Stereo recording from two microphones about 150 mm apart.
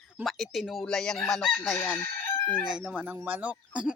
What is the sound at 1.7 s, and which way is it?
Speech, 15° left (ahead or behind).